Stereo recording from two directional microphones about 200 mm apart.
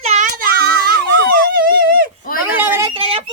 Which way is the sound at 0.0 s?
35° right (ahead or behind).